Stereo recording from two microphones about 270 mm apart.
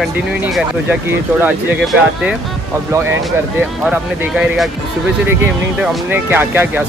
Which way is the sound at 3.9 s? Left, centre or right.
Centre.